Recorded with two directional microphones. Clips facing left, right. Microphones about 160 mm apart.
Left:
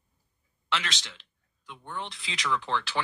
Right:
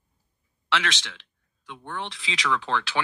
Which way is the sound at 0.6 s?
90° right.